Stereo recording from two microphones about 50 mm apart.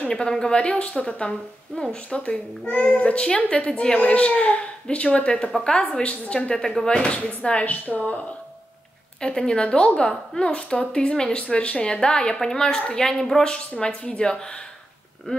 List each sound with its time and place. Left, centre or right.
0.1 s speech: centre
9.2 s a woman's voice: centre
13.4 s a woman's voice: centre